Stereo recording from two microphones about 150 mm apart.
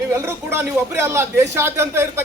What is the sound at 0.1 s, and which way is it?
A man's voice, 15° right (ahead or behind).